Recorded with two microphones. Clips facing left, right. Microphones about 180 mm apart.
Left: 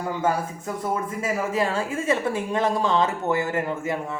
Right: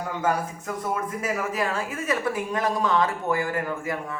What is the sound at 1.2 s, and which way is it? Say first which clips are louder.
Speech: left 5 dB; 30° left (ahead or behind).